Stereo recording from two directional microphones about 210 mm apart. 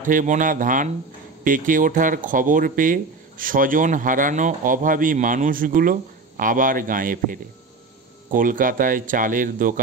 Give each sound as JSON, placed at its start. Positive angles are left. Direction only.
{"t": 0.0, "sound": "speech", "side_deg": -40}